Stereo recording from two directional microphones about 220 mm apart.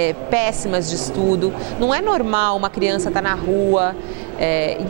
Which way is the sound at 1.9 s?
20° right (ahead or behind).